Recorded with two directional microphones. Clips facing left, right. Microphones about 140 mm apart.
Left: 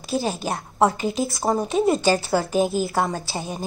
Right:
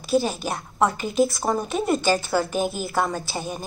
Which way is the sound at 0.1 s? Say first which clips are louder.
Right 3 dB; 25° left (ahead or behind).